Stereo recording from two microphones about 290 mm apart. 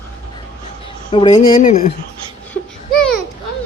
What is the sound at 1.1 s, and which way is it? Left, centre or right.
Music, centre.